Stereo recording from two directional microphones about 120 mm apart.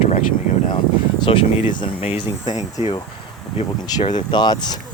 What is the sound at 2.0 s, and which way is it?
Speech, 55° left (ahead or behind).